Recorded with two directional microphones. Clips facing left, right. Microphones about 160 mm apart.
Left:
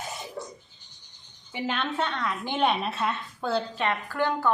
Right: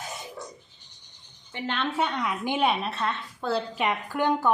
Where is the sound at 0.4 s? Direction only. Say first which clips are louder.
Left 3 dB; 25° left (ahead or behind).